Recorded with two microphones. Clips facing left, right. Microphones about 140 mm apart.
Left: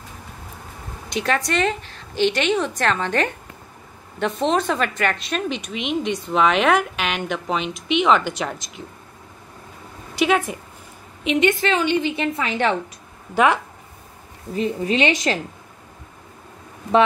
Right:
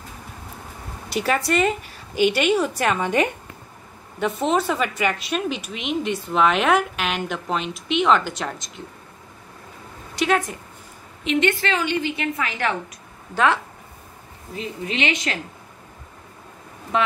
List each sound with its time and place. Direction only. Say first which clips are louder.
1.1 s a woman's voice: right 1 dB; 5° right (ahead or behind)
10.1 s a woman's voice: left 2 dB; 5° left (ahead or behind); by 12.7 s 25° left (ahead or behind)
13.3 s speech: left 2 dB; 15° left (ahead or behind)
14.5 s speech: left 7 dB; 35° left (ahead or behind)